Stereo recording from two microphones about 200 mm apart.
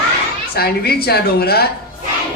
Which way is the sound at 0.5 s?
50° left (ahead or behind).